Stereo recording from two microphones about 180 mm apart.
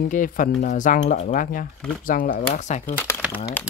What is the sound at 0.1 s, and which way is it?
Speech, 45° left (ahead or behind).